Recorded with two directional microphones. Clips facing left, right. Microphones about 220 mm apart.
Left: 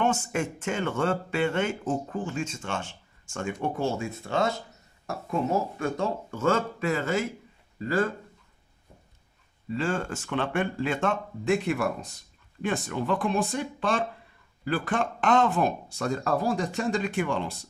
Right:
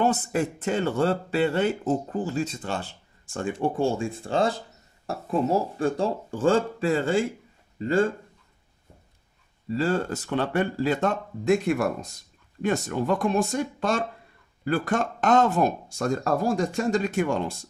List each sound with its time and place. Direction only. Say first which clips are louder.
0.0 s speech: right 3 dB; 35° right (ahead or behind)
9.7 s speech: right 4 dB; 35° right (ahead or behind)